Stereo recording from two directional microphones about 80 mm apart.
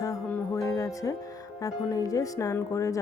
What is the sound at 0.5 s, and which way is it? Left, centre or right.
Music, left.